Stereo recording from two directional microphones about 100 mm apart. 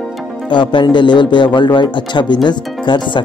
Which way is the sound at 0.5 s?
50° left (ahead or behind).